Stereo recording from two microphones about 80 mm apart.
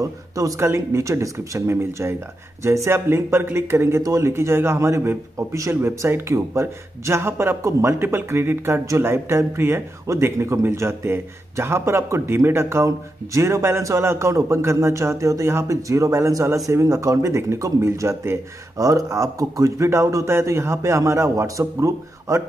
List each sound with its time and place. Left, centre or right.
0.0 s speech: right
0.6 s speech: right